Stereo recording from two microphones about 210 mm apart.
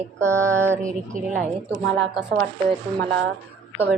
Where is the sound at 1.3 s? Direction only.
35° right (ahead or behind).